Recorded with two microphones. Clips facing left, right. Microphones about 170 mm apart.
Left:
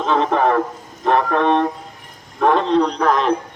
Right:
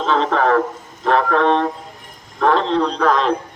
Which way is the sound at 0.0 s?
15° left (ahead or behind).